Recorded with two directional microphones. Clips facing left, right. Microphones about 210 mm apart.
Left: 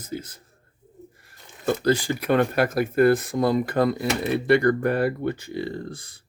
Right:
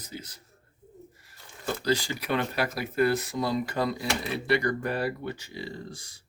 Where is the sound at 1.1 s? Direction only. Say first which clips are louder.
Left 2 dB; 55° left (ahead or behind).